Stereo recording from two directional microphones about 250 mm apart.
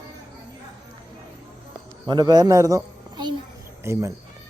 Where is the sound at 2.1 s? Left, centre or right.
Centre.